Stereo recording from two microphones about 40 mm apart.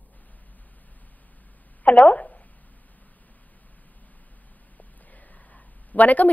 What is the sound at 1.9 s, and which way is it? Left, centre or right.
Speech, left.